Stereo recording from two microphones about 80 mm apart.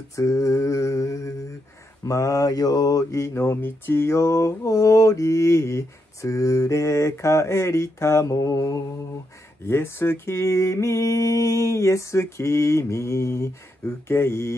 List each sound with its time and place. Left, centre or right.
0.1 s mantra: left
9.7 s mantra: left